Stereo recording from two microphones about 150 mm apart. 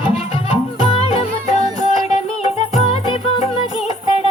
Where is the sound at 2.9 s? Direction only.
40° left (ahead or behind).